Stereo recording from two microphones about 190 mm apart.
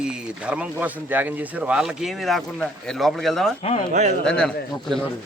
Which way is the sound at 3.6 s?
35° left (ahead or behind).